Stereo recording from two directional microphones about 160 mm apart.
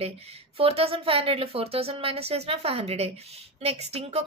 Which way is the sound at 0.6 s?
35° right (ahead or behind).